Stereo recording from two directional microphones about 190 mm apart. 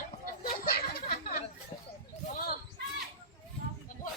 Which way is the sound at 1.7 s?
25° left (ahead or behind).